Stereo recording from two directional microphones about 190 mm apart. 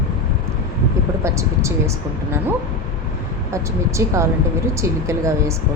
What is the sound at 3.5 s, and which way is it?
A woman's voice, 15° right (ahead or behind).